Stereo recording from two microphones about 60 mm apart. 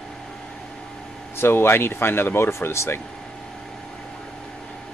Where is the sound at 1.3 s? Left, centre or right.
Left.